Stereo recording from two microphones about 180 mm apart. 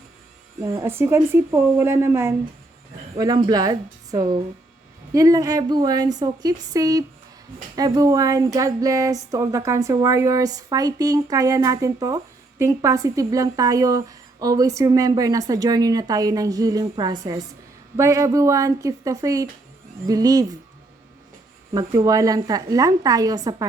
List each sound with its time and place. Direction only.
0.6 s speech: 15° right (ahead or behind)
21.7 s speech: 20° right (ahead or behind)